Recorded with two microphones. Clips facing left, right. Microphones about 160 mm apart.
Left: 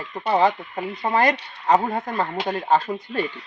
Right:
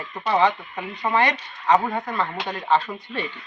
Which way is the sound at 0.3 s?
35° left (ahead or behind).